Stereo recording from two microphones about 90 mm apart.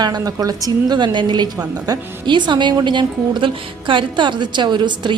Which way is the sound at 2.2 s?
60° right (ahead or behind).